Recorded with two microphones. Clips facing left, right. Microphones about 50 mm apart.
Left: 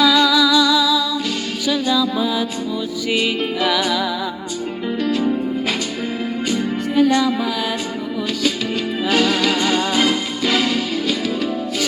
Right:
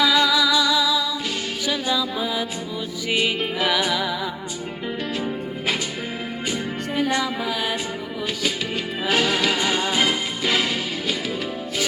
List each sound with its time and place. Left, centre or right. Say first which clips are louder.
0.0 s music: left 4 dB; right
6.5 s music: left 6 dB; right
9.0 s music: left 3 dB; right